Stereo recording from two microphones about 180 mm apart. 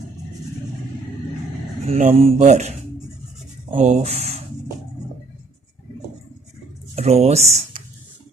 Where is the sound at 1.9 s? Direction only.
35° right (ahead or behind).